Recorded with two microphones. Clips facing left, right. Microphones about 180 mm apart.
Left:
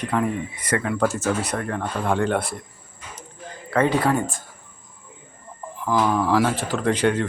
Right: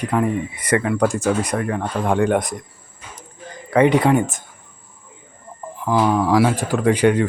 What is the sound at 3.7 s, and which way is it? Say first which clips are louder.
Speech: right 5 dB; 15° right (ahead or behind).